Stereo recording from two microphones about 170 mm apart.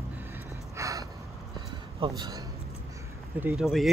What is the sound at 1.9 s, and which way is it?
Speech, 25° right (ahead or behind).